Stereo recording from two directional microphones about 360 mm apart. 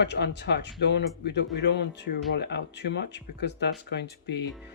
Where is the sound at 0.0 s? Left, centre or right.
Left.